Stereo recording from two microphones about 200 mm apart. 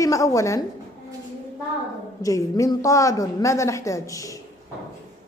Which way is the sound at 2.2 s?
15° left (ahead or behind).